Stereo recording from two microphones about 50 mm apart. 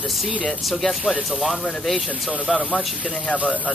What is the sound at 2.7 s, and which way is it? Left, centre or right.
Speech, left.